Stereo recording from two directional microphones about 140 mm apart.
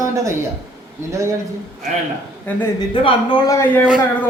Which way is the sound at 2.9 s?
40° left (ahead or behind).